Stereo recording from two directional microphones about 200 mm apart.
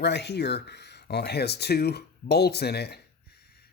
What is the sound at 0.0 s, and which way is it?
Speech, 55° left (ahead or behind).